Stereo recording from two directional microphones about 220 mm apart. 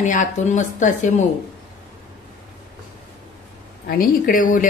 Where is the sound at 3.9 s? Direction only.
40° left (ahead or behind).